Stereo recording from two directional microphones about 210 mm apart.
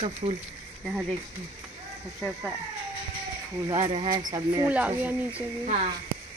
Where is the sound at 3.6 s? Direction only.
20° right (ahead or behind).